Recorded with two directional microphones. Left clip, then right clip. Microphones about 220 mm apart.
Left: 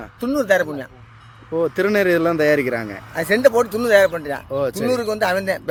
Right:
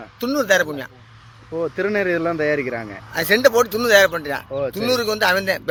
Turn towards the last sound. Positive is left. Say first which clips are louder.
# right 1 dB
turn(degrees=5)  # may be behind; listen again after turning